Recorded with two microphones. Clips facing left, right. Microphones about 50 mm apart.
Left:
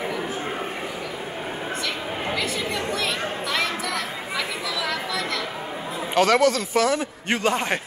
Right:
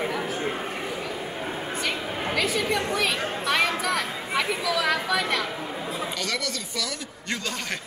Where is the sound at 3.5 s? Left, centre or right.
Centre.